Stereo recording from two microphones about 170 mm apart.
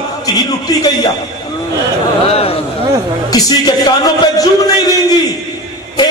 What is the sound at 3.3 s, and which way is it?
Speech, 20° left (ahead or behind).